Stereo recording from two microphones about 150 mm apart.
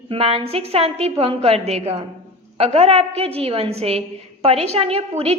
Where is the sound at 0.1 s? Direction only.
40° right (ahead or behind).